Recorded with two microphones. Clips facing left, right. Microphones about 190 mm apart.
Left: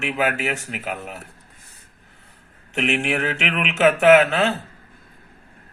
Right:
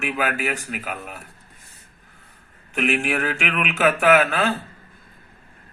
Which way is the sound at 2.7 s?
25° left (ahead or behind).